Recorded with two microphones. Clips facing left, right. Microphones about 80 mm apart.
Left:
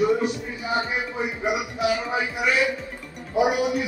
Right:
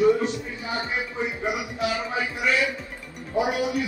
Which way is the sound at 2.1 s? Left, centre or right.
Left.